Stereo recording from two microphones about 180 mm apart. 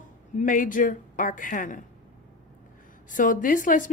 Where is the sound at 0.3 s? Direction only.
45° left (ahead or behind).